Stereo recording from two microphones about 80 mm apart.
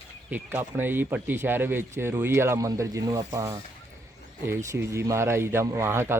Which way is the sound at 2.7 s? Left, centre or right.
Right.